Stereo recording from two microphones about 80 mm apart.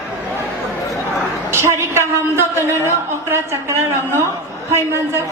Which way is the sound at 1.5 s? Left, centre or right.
Right.